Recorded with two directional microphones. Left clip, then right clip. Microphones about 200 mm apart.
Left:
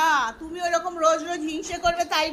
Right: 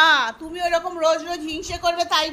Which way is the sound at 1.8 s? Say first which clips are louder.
Right 2 dB; 15° right (ahead or behind).